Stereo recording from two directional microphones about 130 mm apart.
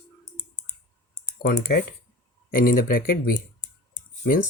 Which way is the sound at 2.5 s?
90° left.